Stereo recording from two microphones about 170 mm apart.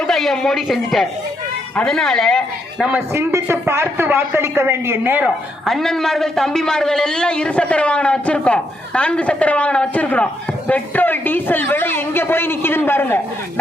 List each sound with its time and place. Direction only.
0.1 s a man's voice: centre (ahead or behind)
3.1 s a woman's voice: 15° right (ahead or behind)
5.6 s a man's voice: centre (ahead or behind)